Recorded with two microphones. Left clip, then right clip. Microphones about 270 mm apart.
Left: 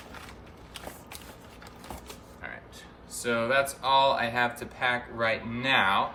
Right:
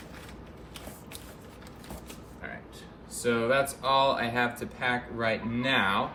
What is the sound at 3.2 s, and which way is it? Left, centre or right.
Speech, centre.